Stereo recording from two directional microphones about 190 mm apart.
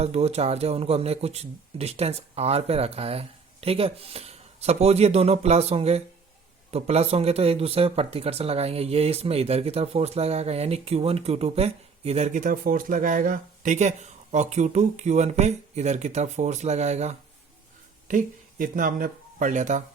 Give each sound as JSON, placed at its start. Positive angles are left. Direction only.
{"t": 0.0, "sound": "speech", "side_deg": -35}